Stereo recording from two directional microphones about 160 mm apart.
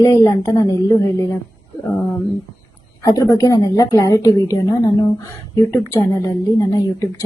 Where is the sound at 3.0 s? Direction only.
20° left (ahead or behind).